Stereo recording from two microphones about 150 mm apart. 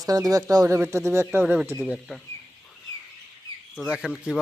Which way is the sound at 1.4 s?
5° right (ahead or behind).